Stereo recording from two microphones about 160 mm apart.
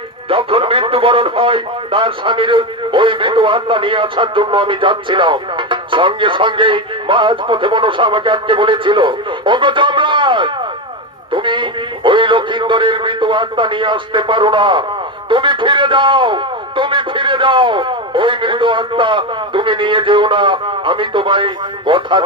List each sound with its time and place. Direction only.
0.3 s speech: 35° right (ahead or behind)